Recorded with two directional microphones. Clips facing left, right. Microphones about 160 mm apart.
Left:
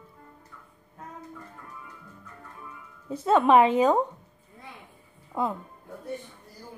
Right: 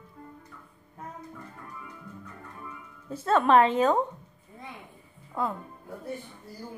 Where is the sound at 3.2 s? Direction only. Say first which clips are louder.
Left 2 dB; 15° left (ahead or behind).